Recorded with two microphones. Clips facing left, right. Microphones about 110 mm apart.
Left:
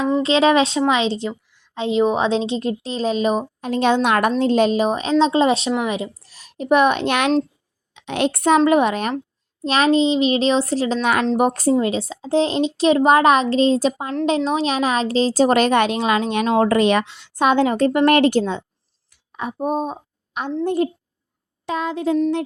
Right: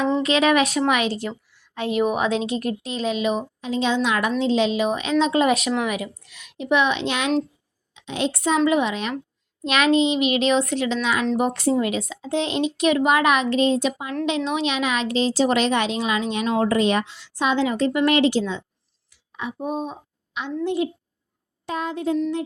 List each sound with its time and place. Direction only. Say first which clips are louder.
0.2 s a woman's voice: left 5 dB; 30° left (ahead or behind)
3.7 s a woman's voice: left 5 dB; 55° left (ahead or behind)
9.6 s a child's voice: left 2 dB; 35° left (ahead or behind)
11.0 s a woman's voice: left 4 dB; 55° left (ahead or behind)
11.7 s a child's voice: left 3 dB; 30° left (ahead or behind); by 18.6 s 55° left (ahead or behind)
19.1 s a sound: left 3 dB; 50° left (ahead or behind)
20.7 s a woman's voice: left 3 dB; 45° left (ahead or behind)
21.7 s speech: left 3 dB; 90° left